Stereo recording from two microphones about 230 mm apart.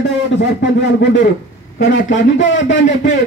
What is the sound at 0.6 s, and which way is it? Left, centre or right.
A man's voice, left.